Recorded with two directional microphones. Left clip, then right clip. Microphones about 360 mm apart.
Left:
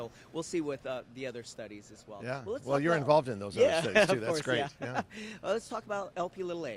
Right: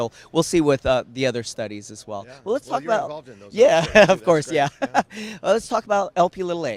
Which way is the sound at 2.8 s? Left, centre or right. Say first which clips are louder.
Right 3 dB; left.